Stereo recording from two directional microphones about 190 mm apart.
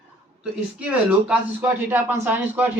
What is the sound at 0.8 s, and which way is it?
Speech, 5° right (ahead or behind).